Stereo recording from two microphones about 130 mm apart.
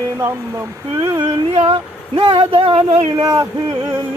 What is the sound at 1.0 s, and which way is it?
Speech, 35° right (ahead or behind).